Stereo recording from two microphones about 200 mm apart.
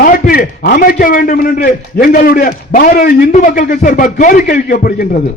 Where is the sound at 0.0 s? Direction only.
50° left (ahead or behind).